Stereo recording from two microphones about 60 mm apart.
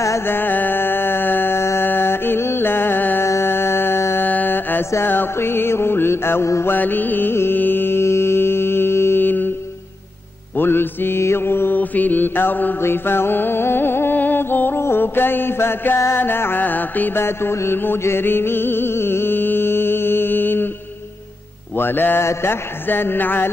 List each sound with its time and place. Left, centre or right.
0.3 s music: left
1.9 s mantra: left
3.3 s music: left
4.3 s mantra: left
4.9 s music: left
10.5 s mantra: left
12.8 s music: left
17.2 s music: left
21.7 s music: left
22.2 s music: left